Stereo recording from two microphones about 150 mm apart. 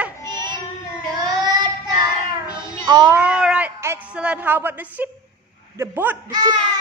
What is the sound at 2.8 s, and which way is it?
Child singing, 25° right (ahead or behind).